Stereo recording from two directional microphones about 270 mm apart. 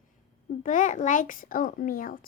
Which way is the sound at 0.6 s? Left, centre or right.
Left.